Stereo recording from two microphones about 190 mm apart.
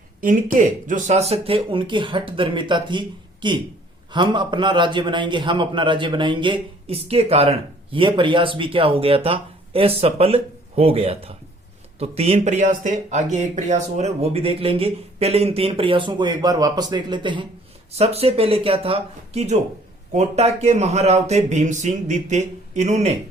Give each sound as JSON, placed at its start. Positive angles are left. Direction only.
{"t": 0.2, "sound": "a man's voice", "side_deg": -45}